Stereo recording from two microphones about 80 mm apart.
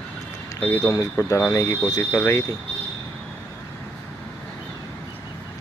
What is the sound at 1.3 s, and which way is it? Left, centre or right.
Speech, left.